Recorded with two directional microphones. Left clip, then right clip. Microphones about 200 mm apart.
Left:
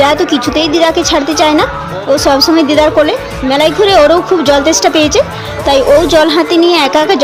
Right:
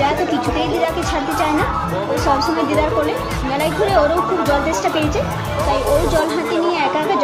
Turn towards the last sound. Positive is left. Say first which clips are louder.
# left 9 dB
turn(degrees=55)  # may be behind; listen again after turning